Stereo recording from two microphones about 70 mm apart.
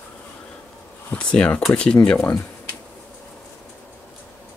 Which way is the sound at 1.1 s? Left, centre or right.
Centre.